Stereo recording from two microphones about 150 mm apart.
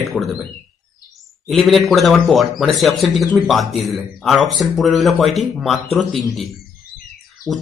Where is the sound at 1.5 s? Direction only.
Centre (ahead or behind).